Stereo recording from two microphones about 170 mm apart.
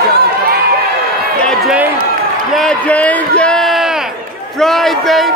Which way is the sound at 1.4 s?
Centre (ahead or behind).